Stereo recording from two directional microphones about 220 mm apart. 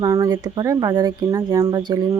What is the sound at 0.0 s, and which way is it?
Speech, 15° right (ahead or behind).